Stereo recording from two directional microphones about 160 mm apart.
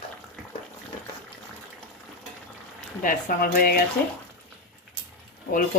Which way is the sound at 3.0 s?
70° left (ahead or behind).